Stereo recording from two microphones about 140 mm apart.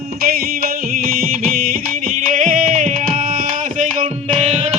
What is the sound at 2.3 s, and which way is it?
Music, 70° right (ahead or behind).